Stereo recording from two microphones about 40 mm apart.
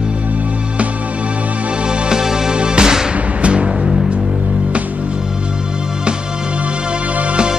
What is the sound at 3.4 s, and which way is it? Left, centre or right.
Music, right.